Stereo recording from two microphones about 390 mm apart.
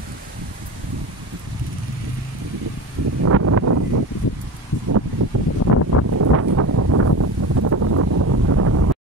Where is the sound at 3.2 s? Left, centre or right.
Right.